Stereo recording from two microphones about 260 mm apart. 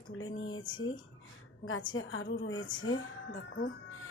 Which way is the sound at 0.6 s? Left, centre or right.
Centre.